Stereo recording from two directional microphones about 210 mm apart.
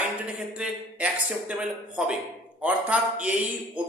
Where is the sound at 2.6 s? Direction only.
5° right (ahead or behind).